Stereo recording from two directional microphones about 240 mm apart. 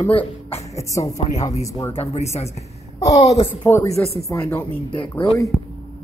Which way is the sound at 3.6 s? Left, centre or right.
Centre.